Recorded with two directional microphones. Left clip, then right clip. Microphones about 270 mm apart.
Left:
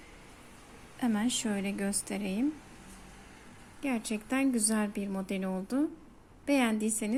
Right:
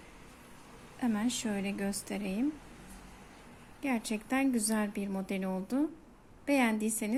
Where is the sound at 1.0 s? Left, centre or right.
Centre.